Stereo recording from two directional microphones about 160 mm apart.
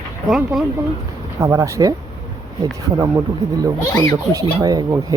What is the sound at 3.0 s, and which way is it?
Speech, 20° right (ahead or behind).